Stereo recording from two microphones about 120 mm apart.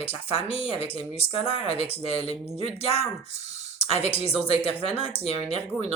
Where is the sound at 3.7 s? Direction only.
60° left (ahead or behind).